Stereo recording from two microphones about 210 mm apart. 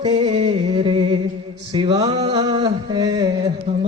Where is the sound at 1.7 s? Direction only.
25° right (ahead or behind).